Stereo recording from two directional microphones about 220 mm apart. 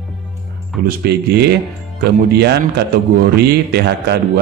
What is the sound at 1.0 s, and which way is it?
Speech, 50° right (ahead or behind).